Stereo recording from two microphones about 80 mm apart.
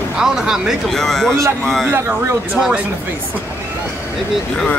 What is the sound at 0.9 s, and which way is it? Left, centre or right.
Speech, centre.